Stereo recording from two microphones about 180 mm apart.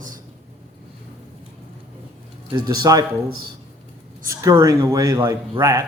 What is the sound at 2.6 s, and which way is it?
Speech, 20° right (ahead or behind).